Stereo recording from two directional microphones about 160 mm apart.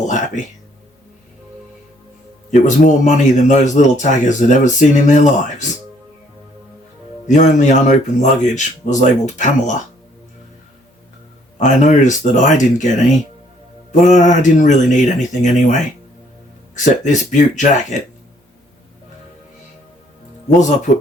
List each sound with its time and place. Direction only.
2.5 s speech: 50° left (ahead or behind)
7.3 s speech: 50° left (ahead or behind)
11.6 s speech: 50° left (ahead or behind)
20.9 s speech: 50° left (ahead or behind)